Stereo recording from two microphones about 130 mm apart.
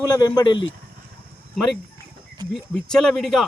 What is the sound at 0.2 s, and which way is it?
Speech, 30° left (ahead or behind).